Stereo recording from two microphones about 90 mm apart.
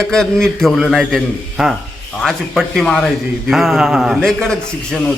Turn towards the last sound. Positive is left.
turn(degrees=10)  # may be behind; listen again after turning